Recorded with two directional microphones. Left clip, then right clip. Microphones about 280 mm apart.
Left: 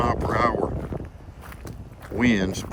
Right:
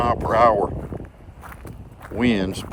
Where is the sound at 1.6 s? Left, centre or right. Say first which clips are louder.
Right 1 dB; centre.